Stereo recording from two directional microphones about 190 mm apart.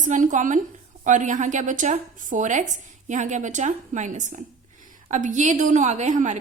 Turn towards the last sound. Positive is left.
turn(degrees=-40)  # may be behind; listen again after turning